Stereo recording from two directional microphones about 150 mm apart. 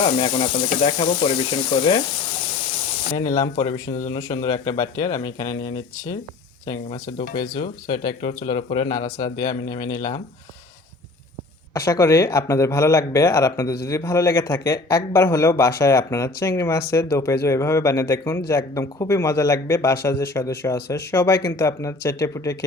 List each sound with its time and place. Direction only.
0.0 s frying: 40° left (ahead or behind)
3.2 s speech: 25° left (ahead or behind)
3.7 s speech: 70° left (ahead or behind)
4.1 s speech: 25° left (ahead or behind)
7.9 s speech: 30° left (ahead or behind)
8.4 s frying: 30° left (ahead or behind)
9.0 s speech: 25° left (ahead or behind)
11.9 s speech: 20° left (ahead or behind)